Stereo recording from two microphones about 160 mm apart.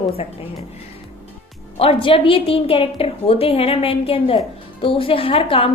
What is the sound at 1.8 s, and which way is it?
A woman's voice, 35° left (ahead or behind).